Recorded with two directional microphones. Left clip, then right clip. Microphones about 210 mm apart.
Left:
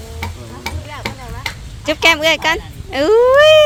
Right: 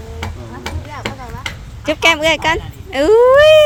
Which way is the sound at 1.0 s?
20° left (ahead or behind).